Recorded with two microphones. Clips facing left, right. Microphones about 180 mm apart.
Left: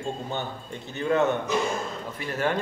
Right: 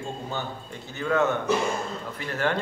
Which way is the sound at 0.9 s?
20° left (ahead or behind).